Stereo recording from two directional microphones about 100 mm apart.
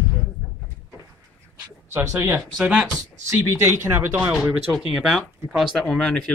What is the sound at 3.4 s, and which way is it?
Speech, 30° right (ahead or behind).